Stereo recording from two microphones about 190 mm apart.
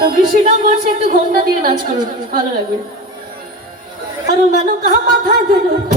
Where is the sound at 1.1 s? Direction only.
50° right (ahead or behind).